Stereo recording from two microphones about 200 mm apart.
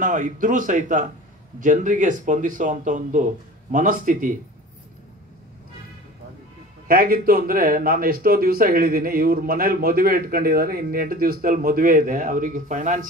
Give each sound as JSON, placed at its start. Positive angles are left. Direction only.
{"t": 0.0, "sound": "speech", "side_deg": -40}
{"t": 6.9, "sound": "speech", "side_deg": -45}